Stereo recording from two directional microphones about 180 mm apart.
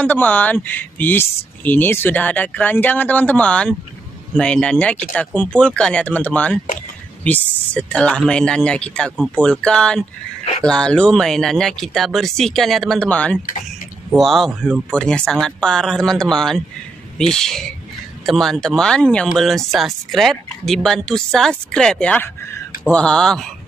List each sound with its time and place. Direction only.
0.0 s speech: 10° left (ahead or behind)